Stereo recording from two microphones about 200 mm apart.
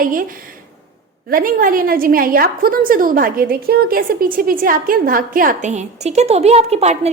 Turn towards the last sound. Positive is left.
turn(degrees=-30)  # may be behind; listen again after turning